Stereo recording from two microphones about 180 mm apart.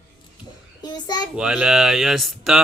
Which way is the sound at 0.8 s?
25° left (ahead or behind).